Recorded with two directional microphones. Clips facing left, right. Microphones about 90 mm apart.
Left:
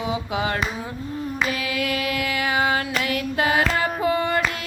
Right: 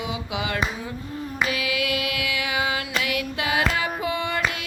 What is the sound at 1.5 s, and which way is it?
Music, 40° left (ahead or behind).